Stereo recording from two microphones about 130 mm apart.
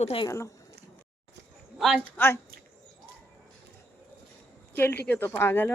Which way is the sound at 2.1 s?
15° left (ahead or behind).